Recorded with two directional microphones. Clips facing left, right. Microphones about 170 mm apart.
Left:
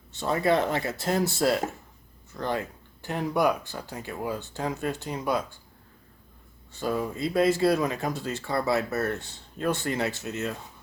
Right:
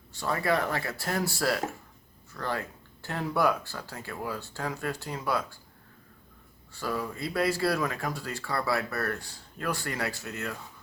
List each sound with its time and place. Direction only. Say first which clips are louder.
0.1 s speech: left 4 dB; 20° left (ahead or behind)
6.7 s speech: left 4 dB; 20° left (ahead or behind)